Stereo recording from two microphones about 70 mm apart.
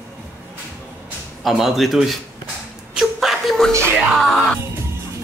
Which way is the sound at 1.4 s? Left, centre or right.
Centre.